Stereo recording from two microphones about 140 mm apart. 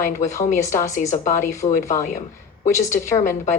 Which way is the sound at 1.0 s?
65° left (ahead or behind).